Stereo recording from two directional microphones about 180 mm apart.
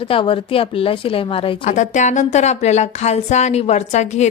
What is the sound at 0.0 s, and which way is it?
Speech, 30° left (ahead or behind).